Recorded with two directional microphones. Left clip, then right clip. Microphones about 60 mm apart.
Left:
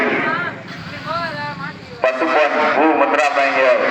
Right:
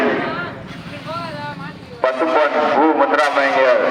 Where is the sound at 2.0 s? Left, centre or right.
Centre.